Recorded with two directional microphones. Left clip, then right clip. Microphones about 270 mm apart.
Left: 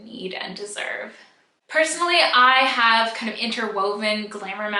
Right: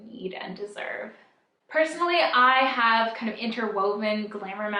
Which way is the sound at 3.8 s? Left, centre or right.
Right.